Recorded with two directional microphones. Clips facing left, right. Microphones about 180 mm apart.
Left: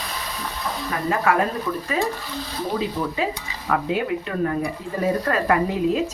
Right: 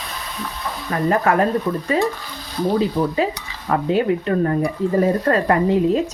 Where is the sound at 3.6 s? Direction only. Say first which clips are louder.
Right 5 dB; 35° right (ahead or behind).